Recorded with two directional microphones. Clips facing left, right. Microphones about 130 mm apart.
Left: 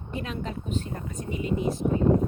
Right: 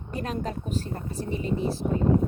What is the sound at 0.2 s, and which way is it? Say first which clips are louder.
Speech: right 3 dB; 40° right (ahead or behind).